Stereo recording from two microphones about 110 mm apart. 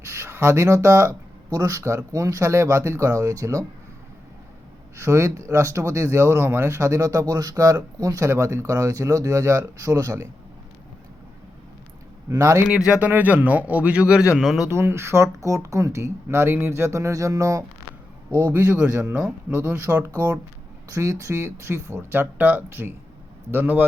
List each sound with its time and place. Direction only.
0.0 s speech: 25° right (ahead or behind)
4.9 s speech: 25° right (ahead or behind)
12.3 s speech: 25° right (ahead or behind)
12.6 s speech: 5° right (ahead or behind)
14.7 s speech: 25° right (ahead or behind)
18.3 s a man's voice: 20° left (ahead or behind)
18.5 s speech: 15° right (ahead or behind)
20.9 s speech: 30° right (ahead or behind)